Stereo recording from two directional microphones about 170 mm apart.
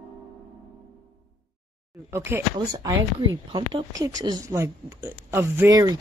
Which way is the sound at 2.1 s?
15° right (ahead or behind).